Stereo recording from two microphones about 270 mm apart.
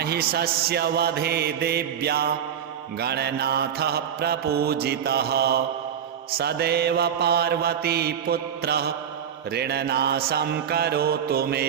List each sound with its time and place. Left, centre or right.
0.0 s mantra: right